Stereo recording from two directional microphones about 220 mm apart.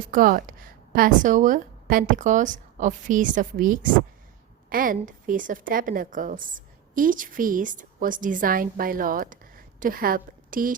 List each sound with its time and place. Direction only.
0.0 s a woman's voice: 40° right (ahead or behind)